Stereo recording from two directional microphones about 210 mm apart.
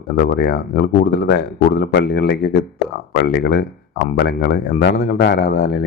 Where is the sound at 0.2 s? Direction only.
45° left (ahead or behind).